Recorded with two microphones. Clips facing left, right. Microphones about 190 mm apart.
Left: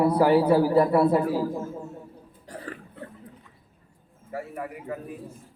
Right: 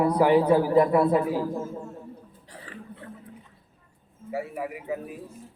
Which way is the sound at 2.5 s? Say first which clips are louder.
Left 8 dB; 45° left (ahead or behind).